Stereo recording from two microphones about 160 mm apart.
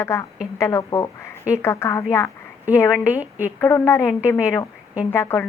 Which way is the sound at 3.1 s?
10° right (ahead or behind).